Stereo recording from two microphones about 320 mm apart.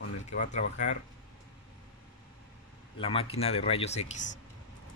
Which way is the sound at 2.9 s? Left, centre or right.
Centre.